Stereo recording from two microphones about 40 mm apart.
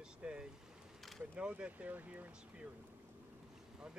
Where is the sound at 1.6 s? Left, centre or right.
Right.